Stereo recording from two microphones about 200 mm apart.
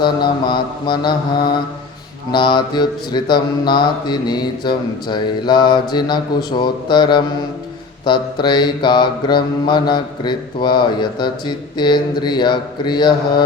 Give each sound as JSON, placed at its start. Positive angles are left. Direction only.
{"t": 0.0, "sound": "mantra", "side_deg": 20}
{"t": 2.3, "sound": "mantra", "side_deg": 25}